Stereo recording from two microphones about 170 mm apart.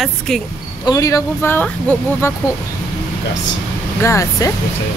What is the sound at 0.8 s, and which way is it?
Speech, 20° left (ahead or behind).